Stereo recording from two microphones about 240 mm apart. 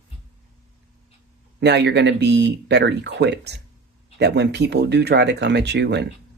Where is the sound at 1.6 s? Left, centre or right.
Right.